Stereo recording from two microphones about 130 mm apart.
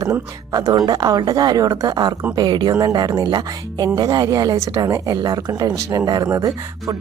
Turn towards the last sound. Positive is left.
turn(degrees=-30)  # may be behind; listen again after turning